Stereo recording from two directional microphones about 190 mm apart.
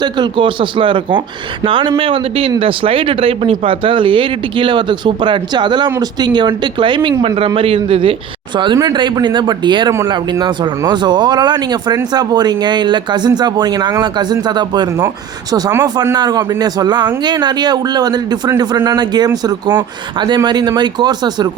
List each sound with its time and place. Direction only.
0.0 s speech: 25° right (ahead or behind)